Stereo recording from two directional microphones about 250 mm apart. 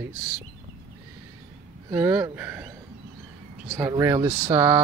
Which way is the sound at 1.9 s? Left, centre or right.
Centre.